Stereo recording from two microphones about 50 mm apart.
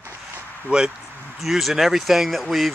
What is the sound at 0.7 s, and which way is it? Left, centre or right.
Speech, right.